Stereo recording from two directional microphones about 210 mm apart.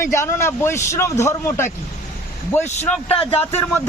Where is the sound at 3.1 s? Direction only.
30° left (ahead or behind).